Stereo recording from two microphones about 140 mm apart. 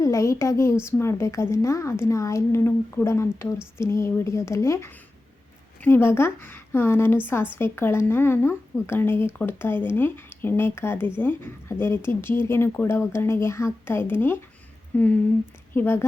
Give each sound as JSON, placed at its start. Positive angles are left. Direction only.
{"t": 0.0, "sound": "a woman's voice", "side_deg": 20}